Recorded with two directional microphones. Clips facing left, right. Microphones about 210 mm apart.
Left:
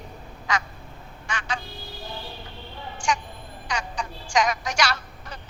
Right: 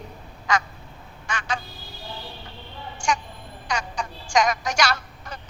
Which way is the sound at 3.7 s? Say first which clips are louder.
Right 2 dB; 45° right (ahead or behind).